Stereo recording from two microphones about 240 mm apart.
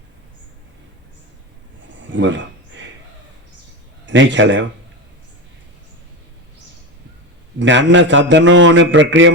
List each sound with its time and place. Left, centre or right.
4.0 s a man's voice: right
7.6 s a man's voice: right